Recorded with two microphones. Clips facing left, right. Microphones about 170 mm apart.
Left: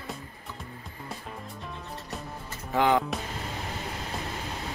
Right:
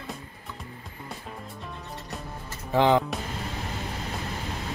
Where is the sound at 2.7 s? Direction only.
25° right (ahead or behind).